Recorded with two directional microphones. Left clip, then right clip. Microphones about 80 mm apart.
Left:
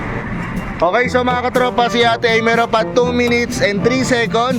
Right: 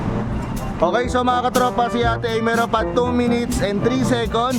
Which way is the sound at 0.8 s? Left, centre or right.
Centre.